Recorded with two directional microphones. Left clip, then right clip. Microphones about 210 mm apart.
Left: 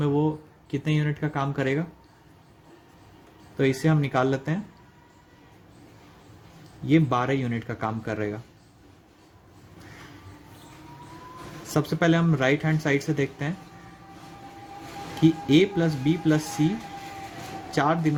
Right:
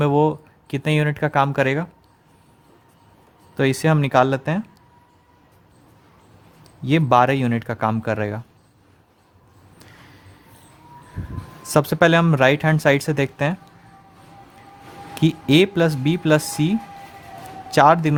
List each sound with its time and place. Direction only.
0.0 s speech: 40° right (ahead or behind)
3.6 s speech: 40° right (ahead or behind)
6.8 s speech: 40° right (ahead or behind)
11.7 s speech: 40° right (ahead or behind)
15.2 s a man's voice: 40° right (ahead or behind)